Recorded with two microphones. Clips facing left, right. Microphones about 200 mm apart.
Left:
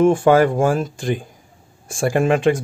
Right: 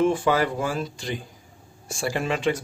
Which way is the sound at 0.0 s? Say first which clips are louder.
Left 8 dB; 50° left (ahead or behind).